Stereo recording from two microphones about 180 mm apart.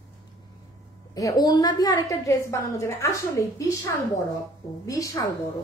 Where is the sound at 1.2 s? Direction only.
20° left (ahead or behind).